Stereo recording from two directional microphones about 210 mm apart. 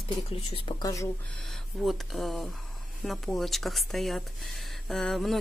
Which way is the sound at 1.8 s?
Centre (ahead or behind).